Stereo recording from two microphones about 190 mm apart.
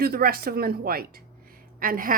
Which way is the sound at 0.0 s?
50° right (ahead or behind).